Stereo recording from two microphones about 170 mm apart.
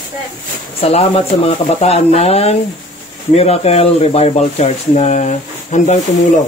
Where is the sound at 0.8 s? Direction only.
35° left (ahead or behind).